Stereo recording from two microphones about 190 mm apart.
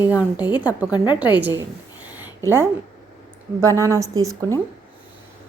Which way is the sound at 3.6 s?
15° right (ahead or behind).